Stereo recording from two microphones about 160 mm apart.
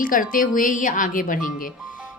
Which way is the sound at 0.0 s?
60° left (ahead or behind).